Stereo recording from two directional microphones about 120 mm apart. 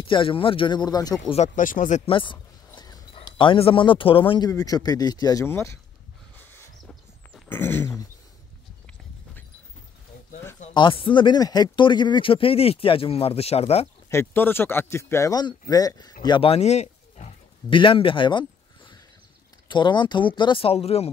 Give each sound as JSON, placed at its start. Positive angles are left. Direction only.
{"t": 0.1, "sound": "speech", "side_deg": 45}
{"t": 1.3, "sound": "speech", "side_deg": 80}
{"t": 2.0, "sound": "a sound", "side_deg": 45}
{"t": 3.3, "sound": "speech", "side_deg": 45}
{"t": 4.5, "sound": "speech", "side_deg": 30}
{"t": 5.4, "sound": "speech", "side_deg": 20}
{"t": 6.8, "sound": "a sound", "side_deg": 0}
{"t": 7.4, "sound": "a sound", "side_deg": 20}
{"t": 10.7, "sound": "speech", "side_deg": 45}
{"t": 14.1, "sound": "speech", "side_deg": 20}
{"t": 16.4, "sound": "speech", "side_deg": 60}
{"t": 17.6, "sound": "speech", "side_deg": 45}
{"t": 19.7, "sound": "speech", "side_deg": 40}